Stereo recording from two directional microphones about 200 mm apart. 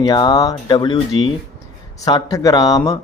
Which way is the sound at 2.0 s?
20° left (ahead or behind).